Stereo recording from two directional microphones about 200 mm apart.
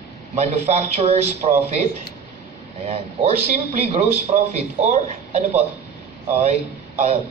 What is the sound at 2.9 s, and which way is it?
A man's voice, 30° right (ahead or behind).